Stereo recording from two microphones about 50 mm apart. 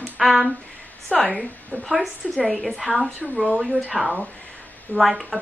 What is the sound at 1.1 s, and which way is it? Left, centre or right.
Speech, centre.